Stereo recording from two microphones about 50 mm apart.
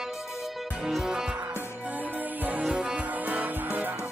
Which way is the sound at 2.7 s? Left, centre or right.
Right.